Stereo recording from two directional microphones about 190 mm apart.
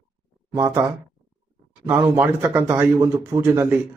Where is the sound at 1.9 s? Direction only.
10° right (ahead or behind).